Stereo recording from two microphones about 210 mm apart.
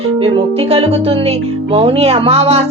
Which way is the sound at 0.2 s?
25° right (ahead or behind).